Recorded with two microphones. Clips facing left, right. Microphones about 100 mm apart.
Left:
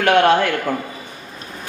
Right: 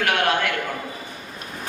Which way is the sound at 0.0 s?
30° left (ahead or behind).